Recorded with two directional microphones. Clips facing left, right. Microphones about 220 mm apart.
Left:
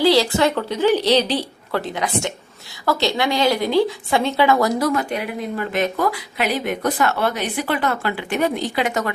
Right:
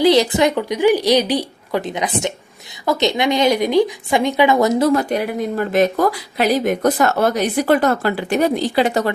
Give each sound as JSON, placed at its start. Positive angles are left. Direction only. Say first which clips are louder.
{"t": 0.0, "sound": "a woman's voice", "louder": "right 2 dB", "side_deg": -20}
{"t": 4.9, "sound": "speech", "louder": "right 5 dB", "side_deg": -40}